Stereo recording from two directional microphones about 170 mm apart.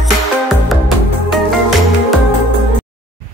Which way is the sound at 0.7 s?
Centre (ahead or behind).